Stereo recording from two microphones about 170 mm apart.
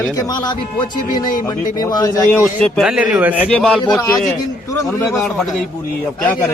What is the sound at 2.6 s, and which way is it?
Speech, 5° left (ahead or behind).